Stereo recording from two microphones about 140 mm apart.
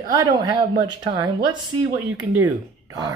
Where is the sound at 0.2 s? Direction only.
25° right (ahead or behind).